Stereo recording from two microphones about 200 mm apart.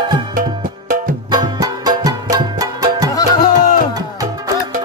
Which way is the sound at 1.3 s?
20° right (ahead or behind).